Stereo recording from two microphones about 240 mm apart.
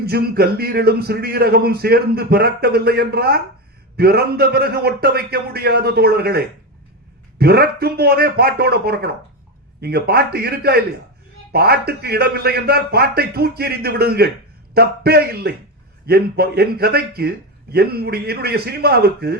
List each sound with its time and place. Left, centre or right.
0.0 s a man's voice: right